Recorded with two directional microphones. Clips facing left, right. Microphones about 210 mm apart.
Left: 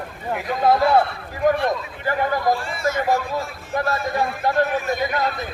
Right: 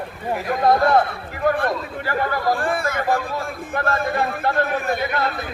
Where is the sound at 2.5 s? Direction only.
55° right (ahead or behind).